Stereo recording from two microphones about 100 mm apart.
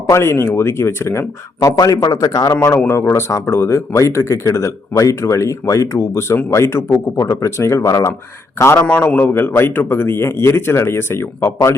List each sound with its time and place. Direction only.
0.1 s a man's voice: 25° left (ahead or behind)
2.7 s a man's voice: 25° left (ahead or behind)
8.8 s speech: 15° left (ahead or behind)